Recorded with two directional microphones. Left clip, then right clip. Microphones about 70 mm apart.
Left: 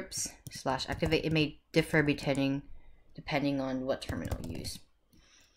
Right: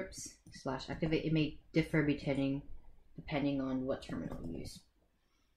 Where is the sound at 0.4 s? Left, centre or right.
Left.